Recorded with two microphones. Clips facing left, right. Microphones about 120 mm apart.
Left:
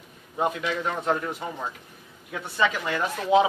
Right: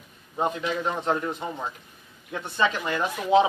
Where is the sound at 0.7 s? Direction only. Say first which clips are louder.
Right 1 dB; 15° right (ahead or behind).